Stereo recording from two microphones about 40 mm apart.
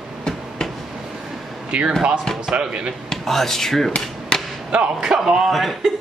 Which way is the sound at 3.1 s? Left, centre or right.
Centre.